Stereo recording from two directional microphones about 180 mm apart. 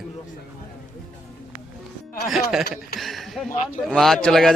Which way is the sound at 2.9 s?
Centre (ahead or behind).